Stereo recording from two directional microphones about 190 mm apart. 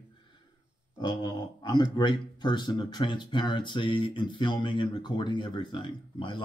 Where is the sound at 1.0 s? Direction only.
20° left (ahead or behind).